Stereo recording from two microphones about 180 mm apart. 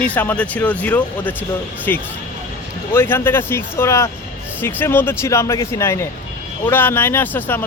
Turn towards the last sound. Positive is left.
turn(degrees=10)  # may be behind; listen again after turning